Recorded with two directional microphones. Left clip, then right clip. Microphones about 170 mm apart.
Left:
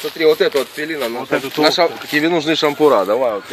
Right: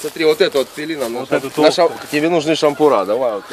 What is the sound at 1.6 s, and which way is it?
Speech, 20° right (ahead or behind).